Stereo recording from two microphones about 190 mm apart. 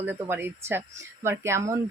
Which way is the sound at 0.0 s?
10° right (ahead or behind).